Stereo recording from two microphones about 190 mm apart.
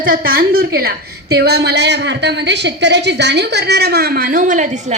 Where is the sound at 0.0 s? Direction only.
50° right (ahead or behind).